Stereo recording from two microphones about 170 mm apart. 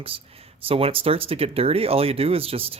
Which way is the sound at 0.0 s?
35° right (ahead or behind).